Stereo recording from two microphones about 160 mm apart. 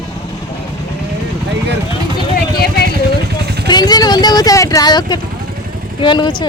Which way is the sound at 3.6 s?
25° left (ahead or behind).